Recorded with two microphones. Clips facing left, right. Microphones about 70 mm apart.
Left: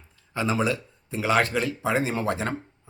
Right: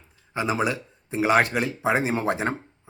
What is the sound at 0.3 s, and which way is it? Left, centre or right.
Speech, centre.